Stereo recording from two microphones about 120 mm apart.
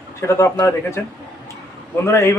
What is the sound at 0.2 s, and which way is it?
Speech, 25° left (ahead or behind).